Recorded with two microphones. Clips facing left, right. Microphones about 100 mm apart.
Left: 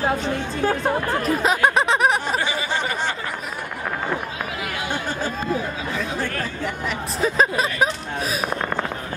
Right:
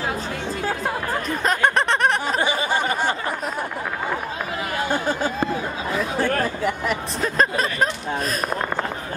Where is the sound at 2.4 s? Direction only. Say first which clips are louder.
Right 3 dB; 45° right (ahead or behind).